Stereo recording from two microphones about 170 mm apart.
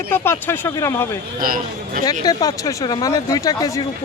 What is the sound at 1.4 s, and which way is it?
Speech, 55° right (ahead or behind).